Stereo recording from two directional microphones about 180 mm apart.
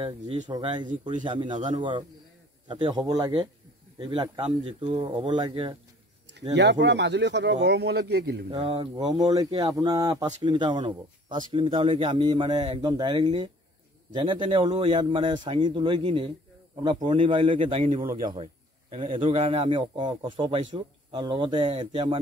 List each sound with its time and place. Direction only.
0.5 s speech: 25° right (ahead or behind)
6.5 s speech: 75° right (ahead or behind)
8.5 s speech: 30° right (ahead or behind)
17.8 s a man's voice: 50° right (ahead or behind)
18.3 s a man's voice: 30° right (ahead or behind)